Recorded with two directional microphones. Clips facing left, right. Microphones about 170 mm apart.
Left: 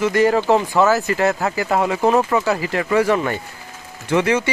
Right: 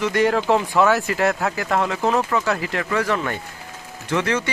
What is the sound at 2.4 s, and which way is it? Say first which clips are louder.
Speech: left 3 dB; 5° left (ahead or behind).